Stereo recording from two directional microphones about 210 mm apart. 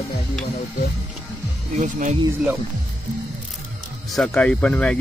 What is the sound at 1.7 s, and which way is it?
Speech, 35° right (ahead or behind).